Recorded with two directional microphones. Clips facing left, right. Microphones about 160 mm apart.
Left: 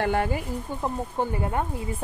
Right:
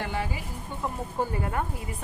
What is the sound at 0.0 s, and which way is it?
Speech, 55° left (ahead or behind).